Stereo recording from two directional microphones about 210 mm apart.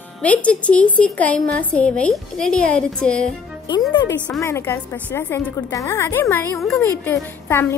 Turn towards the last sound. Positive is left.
turn(degrees=10)  # may be behind; listen again after turning